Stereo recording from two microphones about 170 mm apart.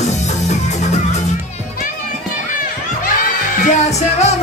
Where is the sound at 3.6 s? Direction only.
40° left (ahead or behind).